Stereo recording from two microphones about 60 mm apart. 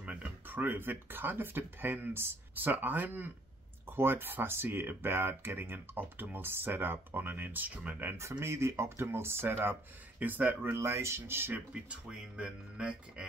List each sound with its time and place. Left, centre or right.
0.0 s speech: right
8.1 s speech: right
11.7 s speech: centre